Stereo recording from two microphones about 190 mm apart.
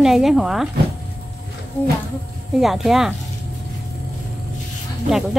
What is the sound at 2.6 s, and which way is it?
Speech, centre (ahead or behind).